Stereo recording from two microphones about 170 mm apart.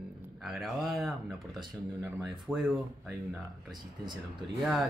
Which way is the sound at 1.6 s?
15° right (ahead or behind).